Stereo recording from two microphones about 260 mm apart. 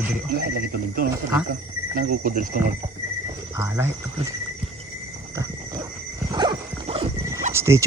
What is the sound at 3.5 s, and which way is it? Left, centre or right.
Speech, centre.